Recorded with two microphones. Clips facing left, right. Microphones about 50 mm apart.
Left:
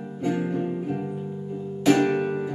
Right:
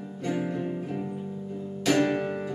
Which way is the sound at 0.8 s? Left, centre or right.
Centre.